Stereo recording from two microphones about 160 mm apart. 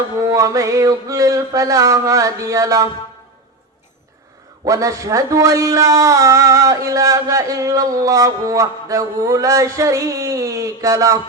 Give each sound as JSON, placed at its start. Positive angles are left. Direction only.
{"t": 0.2, "sound": "a man's voice", "side_deg": -20}
{"t": 4.6, "sound": "a man's voice", "side_deg": -20}